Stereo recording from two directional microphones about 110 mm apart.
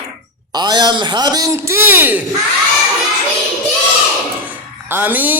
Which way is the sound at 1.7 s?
20° right (ahead or behind).